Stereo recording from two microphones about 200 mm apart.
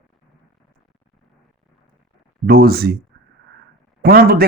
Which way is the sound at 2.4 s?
50° right (ahead or behind).